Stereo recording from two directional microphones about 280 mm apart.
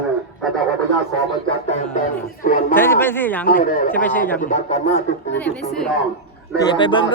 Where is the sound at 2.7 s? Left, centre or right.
Centre.